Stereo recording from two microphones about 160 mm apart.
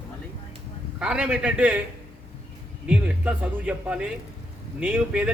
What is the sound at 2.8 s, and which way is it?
A man's voice, 5° right (ahead or behind).